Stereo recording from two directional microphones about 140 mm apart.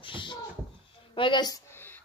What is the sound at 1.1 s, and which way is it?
Speech, 35° left (ahead or behind).